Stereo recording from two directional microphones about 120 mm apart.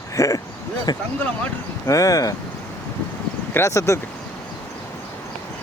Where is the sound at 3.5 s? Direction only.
25° left (ahead or behind).